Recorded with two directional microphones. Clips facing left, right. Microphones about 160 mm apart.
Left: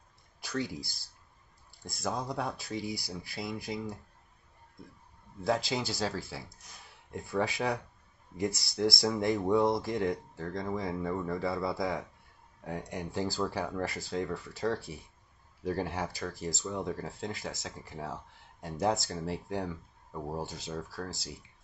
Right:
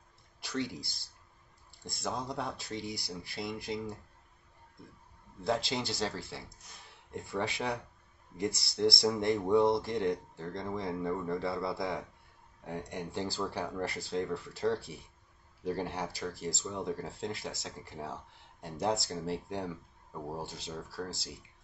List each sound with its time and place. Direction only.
0.4 s a sound: centre (ahead or behind)
1.9 s speech: centre (ahead or behind)
5.4 s speech: 5° left (ahead or behind)
7.2 s speech: centre (ahead or behind)